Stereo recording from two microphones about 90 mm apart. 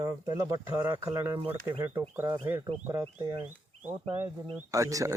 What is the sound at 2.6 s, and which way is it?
Speech, 40° right (ahead or behind).